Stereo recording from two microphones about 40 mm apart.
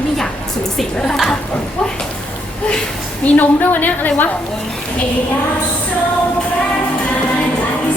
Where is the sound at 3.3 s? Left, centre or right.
Left.